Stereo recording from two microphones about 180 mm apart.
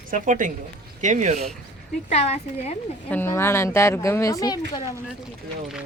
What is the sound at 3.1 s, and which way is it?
A woman's voice, 10° left (ahead or behind).